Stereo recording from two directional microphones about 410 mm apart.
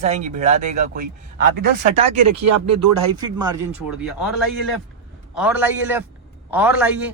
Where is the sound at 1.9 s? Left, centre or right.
Right.